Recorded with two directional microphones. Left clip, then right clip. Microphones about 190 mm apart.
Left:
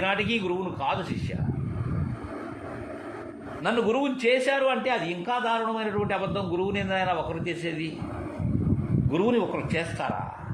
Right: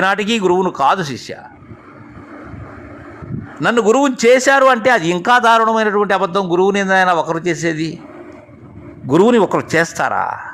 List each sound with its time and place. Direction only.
0.0 s a man's voice: 40° right (ahead or behind)
3.6 s a man's voice: 45° right (ahead or behind)
9.0 s speech: 45° right (ahead or behind)